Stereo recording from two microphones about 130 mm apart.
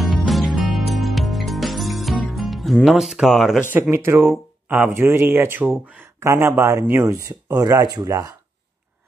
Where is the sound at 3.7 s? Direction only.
15° right (ahead or behind).